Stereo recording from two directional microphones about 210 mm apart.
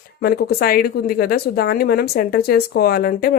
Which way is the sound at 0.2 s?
50° left (ahead or behind).